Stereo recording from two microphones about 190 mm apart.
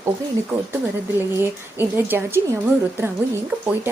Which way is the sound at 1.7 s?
10° right (ahead or behind).